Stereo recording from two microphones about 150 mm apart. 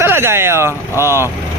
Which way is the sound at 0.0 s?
15° right (ahead or behind).